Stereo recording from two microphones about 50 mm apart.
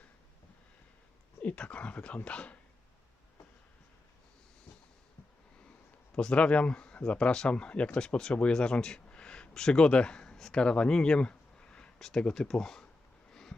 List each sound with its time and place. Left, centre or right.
1.4 s speech: left
6.1 s speech: left
10.3 s a sound: centre
10.6 s speech: centre
11.9 s speech: centre
13.3 s a sound: centre